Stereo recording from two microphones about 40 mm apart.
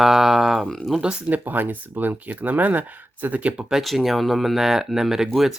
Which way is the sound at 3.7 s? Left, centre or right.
Centre.